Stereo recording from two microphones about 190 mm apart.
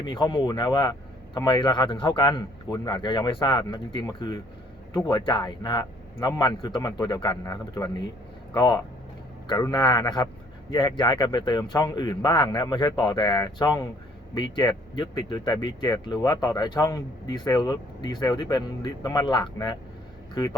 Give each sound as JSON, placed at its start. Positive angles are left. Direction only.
{"t": 0.0, "sound": "a man's voice", "side_deg": 25}